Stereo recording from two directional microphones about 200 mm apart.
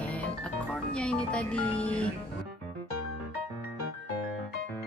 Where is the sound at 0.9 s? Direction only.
5° left (ahead or behind).